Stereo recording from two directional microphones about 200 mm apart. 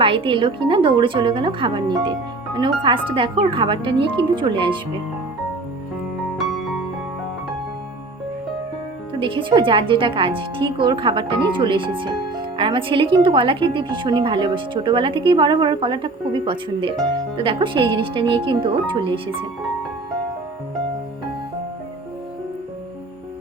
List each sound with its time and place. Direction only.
0.0 s speech: 25° right (ahead or behind)
6.4 s music: centre (ahead or behind)
9.1 s speech: 25° right (ahead or behind)